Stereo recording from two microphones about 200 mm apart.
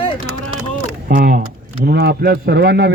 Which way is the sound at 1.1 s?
45° right (ahead or behind).